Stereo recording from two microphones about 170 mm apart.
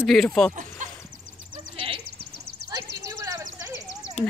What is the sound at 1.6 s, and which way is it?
Sheep, 30° right (ahead or behind).